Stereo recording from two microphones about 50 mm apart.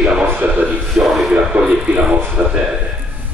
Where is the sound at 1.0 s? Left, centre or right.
Centre.